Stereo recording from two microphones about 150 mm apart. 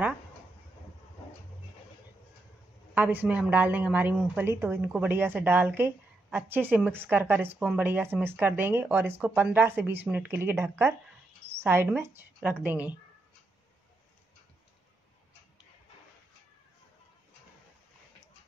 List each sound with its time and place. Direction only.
2.9 s a woman's voice: 10° right (ahead or behind)